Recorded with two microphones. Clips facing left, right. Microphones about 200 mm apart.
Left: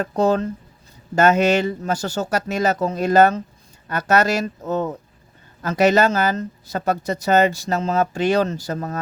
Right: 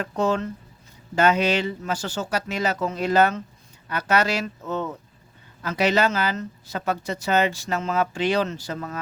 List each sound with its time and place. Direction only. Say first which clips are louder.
0.0 s speech: left 5 dB; 35° left (ahead or behind)